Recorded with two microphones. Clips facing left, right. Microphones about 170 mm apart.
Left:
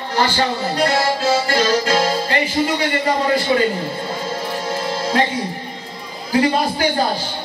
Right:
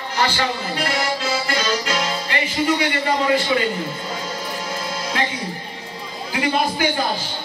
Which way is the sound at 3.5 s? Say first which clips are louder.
Left 4 dB; 40° left (ahead or behind).